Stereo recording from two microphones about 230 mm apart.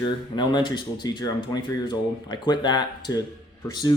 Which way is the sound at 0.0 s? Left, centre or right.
Centre.